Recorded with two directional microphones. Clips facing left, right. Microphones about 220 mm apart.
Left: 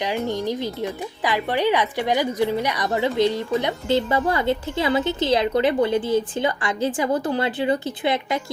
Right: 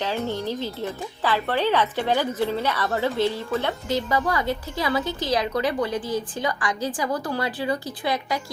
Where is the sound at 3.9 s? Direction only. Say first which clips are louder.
Left 4 dB; 30° left (ahead or behind).